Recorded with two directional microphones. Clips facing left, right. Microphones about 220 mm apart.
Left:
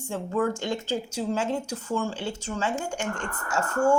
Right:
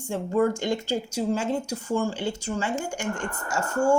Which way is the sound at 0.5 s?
15° right (ahead or behind).